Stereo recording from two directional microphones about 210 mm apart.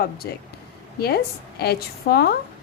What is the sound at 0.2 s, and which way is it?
A woman's voice, 50° left (ahead or behind).